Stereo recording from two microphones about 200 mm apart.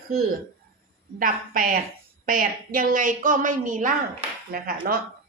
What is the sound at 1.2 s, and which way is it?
A woman's voice, 45° right (ahead or behind).